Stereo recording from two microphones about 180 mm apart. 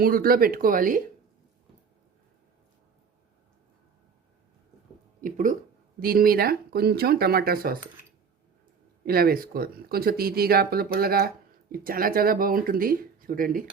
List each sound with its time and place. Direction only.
0.0 s speech: 55° right (ahead or behind)
5.2 s speech: 45° right (ahead or behind)
9.0 s speech: 55° right (ahead or behind)